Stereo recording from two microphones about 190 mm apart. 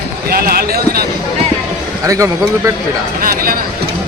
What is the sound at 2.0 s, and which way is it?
Speech, 15° right (ahead or behind).